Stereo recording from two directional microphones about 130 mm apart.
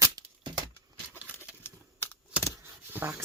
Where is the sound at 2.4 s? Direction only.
20° left (ahead or behind).